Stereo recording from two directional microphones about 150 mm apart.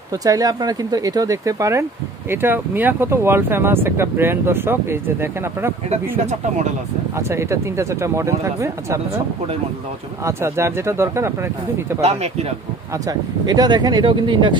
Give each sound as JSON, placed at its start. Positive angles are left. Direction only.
{"t": 0.1, "sound": "speech", "side_deg": -25}
{"t": 7.2, "sound": "speech", "side_deg": -20}
{"t": 10.2, "sound": "speech", "side_deg": -15}
{"t": 12.0, "sound": "speech", "side_deg": -45}
{"t": 12.9, "sound": "speech", "side_deg": -25}